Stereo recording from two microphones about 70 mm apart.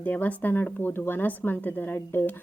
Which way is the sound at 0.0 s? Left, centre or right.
Left.